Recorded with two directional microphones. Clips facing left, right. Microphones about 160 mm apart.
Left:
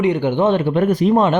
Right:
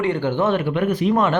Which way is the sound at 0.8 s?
35° left (ahead or behind).